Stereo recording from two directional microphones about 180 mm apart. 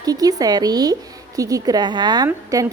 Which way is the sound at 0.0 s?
20° right (ahead or behind).